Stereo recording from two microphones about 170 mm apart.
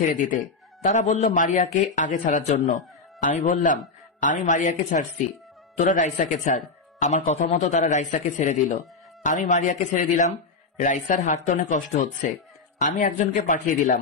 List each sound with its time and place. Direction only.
0.0 s speech: 50° left (ahead or behind)